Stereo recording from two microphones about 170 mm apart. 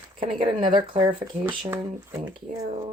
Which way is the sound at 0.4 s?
30° right (ahead or behind).